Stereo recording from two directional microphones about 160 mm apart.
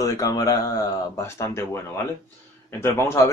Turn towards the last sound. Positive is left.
turn(degrees=15)  # may be behind; listen again after turning